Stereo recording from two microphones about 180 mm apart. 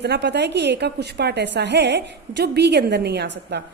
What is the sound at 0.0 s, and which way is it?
A woman's voice, 70° right (ahead or behind).